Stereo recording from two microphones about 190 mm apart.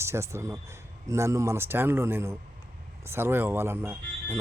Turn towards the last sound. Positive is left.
turn(degrees=-10)  # may be behind; listen again after turning